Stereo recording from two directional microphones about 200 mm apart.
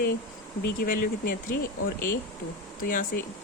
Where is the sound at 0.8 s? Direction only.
45° left (ahead or behind).